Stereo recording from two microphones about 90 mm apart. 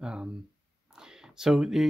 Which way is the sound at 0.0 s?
10° right (ahead or behind).